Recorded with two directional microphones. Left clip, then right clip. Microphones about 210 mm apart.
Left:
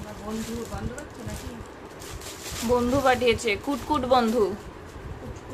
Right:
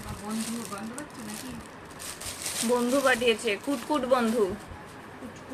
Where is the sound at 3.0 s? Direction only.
15° left (ahead or behind).